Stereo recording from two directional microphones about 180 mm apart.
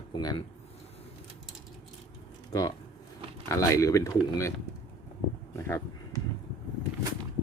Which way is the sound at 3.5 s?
15° left (ahead or behind).